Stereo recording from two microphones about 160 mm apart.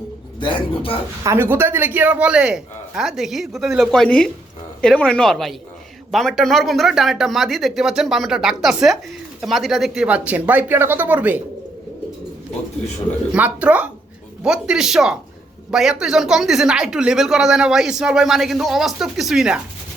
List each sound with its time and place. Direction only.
0.3 s speech: 30° left (ahead or behind)
1.2 s speech: 15° right (ahead or behind)
13.3 s speech: 10° right (ahead or behind)